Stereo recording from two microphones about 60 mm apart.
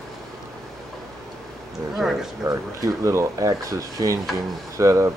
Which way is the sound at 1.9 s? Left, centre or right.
Centre.